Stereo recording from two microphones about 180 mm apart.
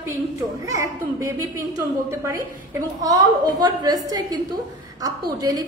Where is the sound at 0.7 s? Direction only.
15° right (ahead or behind).